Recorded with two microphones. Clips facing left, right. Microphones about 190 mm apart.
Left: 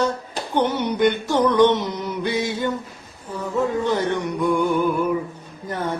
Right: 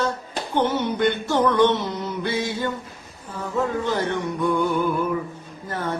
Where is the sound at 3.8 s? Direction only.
15° left (ahead or behind).